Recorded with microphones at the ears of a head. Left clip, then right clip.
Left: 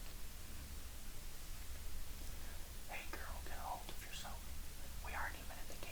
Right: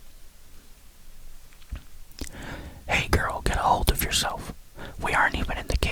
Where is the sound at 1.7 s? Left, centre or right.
Right.